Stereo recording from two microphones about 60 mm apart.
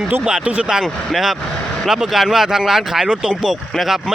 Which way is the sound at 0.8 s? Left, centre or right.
Centre.